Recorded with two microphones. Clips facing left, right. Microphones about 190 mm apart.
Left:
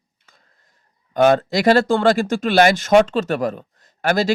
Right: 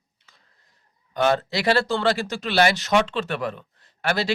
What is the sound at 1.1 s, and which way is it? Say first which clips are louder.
Speech: left 7 dB; 50° left (ahead or behind).